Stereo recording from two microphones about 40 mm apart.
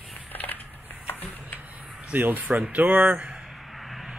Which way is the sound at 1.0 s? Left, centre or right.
Left.